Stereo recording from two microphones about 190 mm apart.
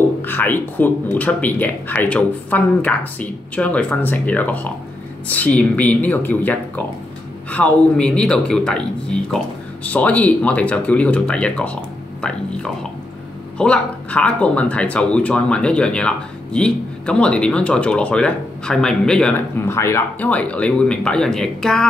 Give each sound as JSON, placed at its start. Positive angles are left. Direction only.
{"t": 0.2, "sound": "speech", "side_deg": 10}
{"t": 9.8, "sound": "speech", "side_deg": 10}